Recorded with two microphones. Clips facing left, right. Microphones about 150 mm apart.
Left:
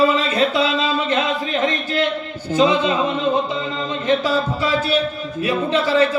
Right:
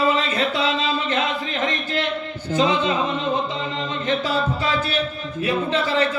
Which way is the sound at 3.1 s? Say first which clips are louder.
Left 4 dB; 30° left (ahead or behind).